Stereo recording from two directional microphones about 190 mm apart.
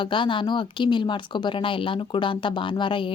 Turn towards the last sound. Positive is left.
turn(degrees=25)  # may be behind; listen again after turning